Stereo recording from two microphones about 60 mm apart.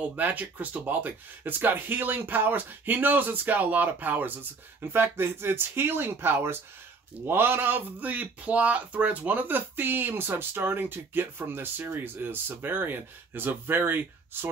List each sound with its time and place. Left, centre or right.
0.1 s speech: right